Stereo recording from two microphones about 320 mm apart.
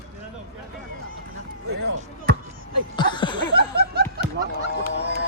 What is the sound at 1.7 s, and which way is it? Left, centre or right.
Basketball bounce, right.